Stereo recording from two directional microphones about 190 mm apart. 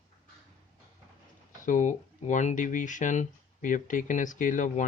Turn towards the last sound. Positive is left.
turn(degrees=45)  # may be behind; listen again after turning